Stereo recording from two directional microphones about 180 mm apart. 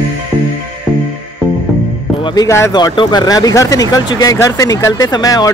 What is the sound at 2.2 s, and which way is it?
Speech, 20° left (ahead or behind).